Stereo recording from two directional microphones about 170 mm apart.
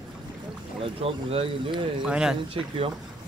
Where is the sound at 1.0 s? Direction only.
35° right (ahead or behind).